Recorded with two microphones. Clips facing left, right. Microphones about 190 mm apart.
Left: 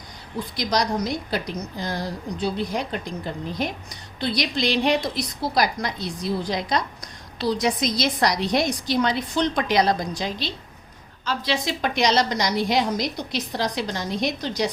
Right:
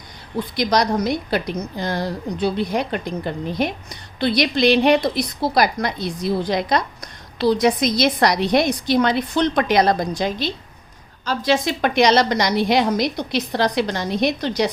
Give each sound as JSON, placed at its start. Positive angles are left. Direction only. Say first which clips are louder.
{"t": 0.3, "sound": "a woman's voice", "louder": "right 5 dB", "side_deg": -65}